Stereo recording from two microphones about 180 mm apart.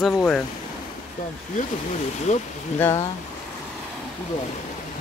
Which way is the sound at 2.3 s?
40° left (ahead or behind).